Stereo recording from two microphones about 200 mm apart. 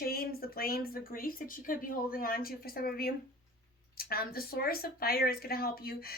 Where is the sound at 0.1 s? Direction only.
50° left (ahead or behind).